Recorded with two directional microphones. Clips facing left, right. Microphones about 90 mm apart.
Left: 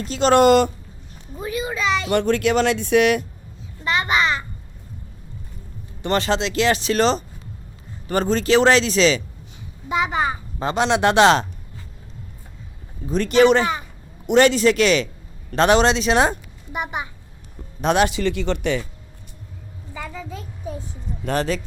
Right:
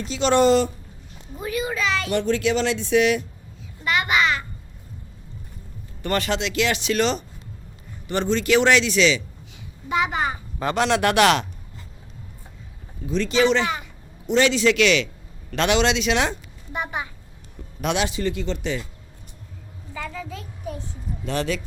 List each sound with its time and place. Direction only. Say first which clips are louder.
0.1 s speech: left 3 dB; 45° left (ahead or behind)
1.4 s a sound: even; 25° left (ahead or behind)
2.1 s speech: left 3 dB; 55° left (ahead or behind)
3.8 s babbling: left 1 dB; 30° left (ahead or behind)
6.0 s speech: left 3 dB; 25° left (ahead or behind)
10.6 s speech: left 2 dB; 25° left (ahead or behind)
13.1 s a man's voice: left 5 dB; 50° left (ahead or behind); by 16.3 s 35° left (ahead or behind)
16.7 s a child's voice: left 1 dB; 20° left (ahead or behind)
17.7 s speech: left 5 dB; 40° left (ahead or behind)
18.0 s speech: left 5 dB; 75° left (ahead or behind)
19.9 s a sound: even; 15° left (ahead or behind)
21.2 s speech: left 3 dB; 40° left (ahead or behind)